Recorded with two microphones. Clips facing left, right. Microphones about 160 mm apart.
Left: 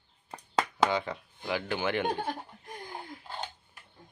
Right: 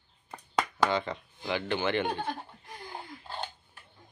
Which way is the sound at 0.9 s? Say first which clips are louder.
Right 1 dB; 10° left (ahead or behind).